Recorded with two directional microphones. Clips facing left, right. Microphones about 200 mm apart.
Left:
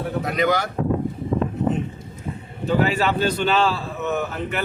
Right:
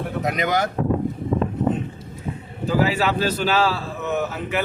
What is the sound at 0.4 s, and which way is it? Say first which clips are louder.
Speech: left 2 dB; 20° right (ahead or behind).